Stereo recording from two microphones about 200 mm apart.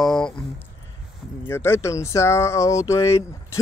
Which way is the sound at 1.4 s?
10° left (ahead or behind).